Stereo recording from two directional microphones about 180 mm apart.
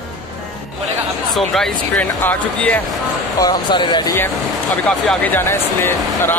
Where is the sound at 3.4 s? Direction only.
25° left (ahead or behind).